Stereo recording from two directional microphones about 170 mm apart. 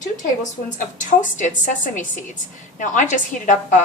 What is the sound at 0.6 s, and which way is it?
Speech, 50° left (ahead or behind).